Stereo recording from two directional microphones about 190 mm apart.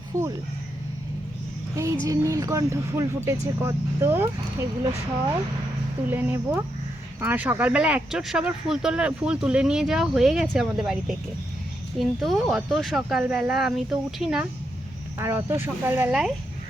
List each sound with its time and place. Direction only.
0.1 s speech: 15° right (ahead or behind)
1.7 s a sound: 15° right (ahead or behind)
2.0 s speech: 15° right (ahead or behind)
6.1 s speech: 10° right (ahead or behind)
11.9 s speech: centre (ahead or behind)